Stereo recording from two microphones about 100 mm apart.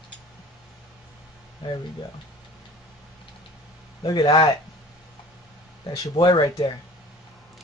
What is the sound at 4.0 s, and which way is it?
Speech, 45° left (ahead or behind).